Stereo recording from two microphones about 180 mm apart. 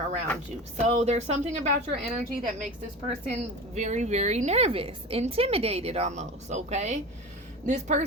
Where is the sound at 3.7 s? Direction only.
40° right (ahead or behind).